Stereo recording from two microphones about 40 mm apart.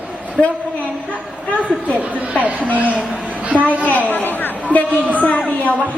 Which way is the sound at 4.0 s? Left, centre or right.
Left.